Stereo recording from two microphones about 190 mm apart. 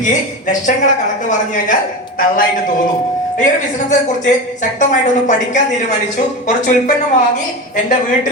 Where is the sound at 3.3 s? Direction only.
40° left (ahead or behind).